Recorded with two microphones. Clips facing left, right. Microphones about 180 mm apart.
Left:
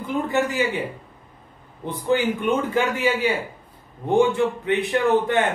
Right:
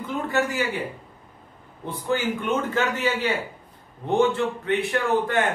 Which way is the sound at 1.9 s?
15° left (ahead or behind).